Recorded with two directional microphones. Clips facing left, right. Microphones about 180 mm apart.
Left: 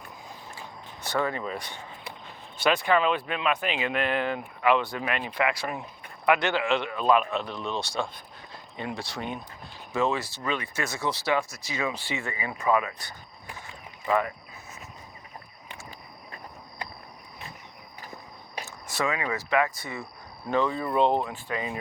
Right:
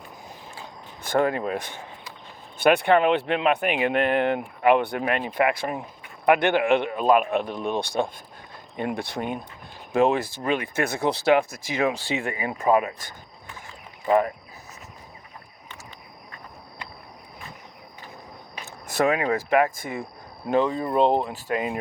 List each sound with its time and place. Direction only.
1.0 s speech: 50° right (ahead or behind)
2.6 s speech: 65° right (ahead or behind)
5.0 s speech: 45° right (ahead or behind); by 12.3 s 80° right
12.3 s speech: 50° right (ahead or behind)
18.6 s speech: 60° right (ahead or behind)